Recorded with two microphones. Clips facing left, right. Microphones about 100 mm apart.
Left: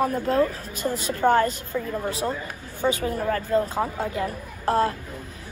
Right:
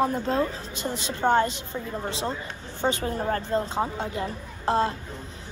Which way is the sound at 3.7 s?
5° left (ahead or behind).